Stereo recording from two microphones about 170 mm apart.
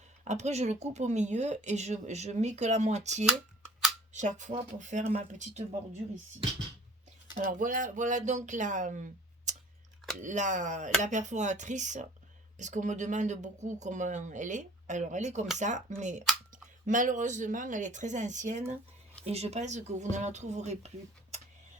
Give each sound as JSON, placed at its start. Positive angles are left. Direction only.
{"t": 0.3, "sound": "speech", "side_deg": -40}
{"t": 7.3, "sound": "speech", "side_deg": -55}
{"t": 9.5, "sound": "scissors", "side_deg": -45}
{"t": 10.2, "sound": "speech", "side_deg": -45}